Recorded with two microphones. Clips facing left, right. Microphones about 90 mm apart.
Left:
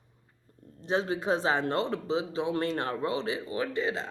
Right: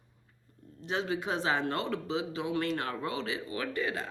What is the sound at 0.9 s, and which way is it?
Speech, 35° left (ahead or behind).